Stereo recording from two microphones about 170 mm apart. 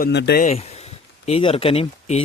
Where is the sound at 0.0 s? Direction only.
85° left.